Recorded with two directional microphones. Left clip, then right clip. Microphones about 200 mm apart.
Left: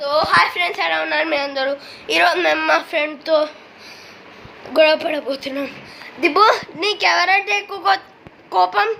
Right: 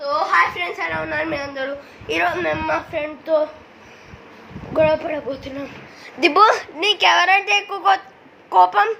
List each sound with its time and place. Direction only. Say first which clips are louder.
0.1 s a sound: left 2 dB; 10° left (ahead or behind)
0.6 s a woman's voice: left 5 dB; 20° left (ahead or behind)
4.7 s a woman's voice: left 3 dB; 15° left (ahead or behind)
6.3 s a woman's voice: even; 10° left (ahead or behind)